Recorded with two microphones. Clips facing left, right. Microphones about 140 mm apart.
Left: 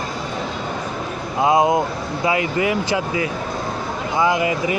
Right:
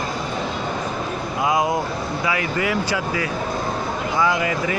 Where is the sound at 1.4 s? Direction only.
25° left (ahead or behind).